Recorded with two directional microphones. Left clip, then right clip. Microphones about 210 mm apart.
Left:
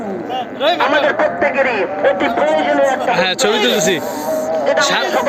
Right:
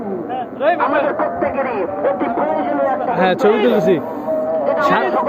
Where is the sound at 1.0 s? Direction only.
45° right (ahead or behind).